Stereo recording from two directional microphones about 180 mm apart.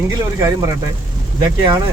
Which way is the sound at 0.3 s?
15° right (ahead or behind).